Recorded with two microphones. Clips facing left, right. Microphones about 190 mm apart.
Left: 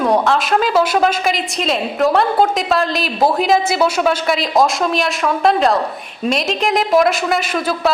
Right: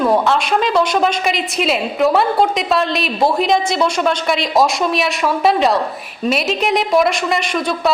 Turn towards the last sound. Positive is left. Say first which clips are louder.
# even
turn(degrees=5)  # may be behind; listen again after turning